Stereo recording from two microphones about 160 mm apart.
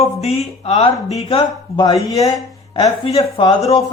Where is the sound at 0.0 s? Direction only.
40° left (ahead or behind).